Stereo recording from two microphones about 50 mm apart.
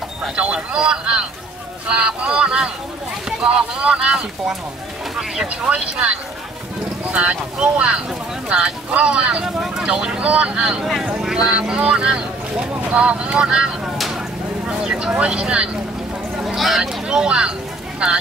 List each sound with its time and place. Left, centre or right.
0.4 s speech: right
10.8 s speech: centre; by 15.8 s right
16.4 s speech: centre
17.1 s speech: centre